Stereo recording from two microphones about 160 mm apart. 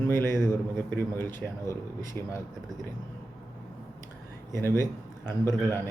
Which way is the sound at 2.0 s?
25° right (ahead or behind).